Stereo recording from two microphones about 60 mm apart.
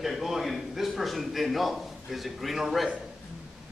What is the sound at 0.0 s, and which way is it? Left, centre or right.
A man's voice, centre.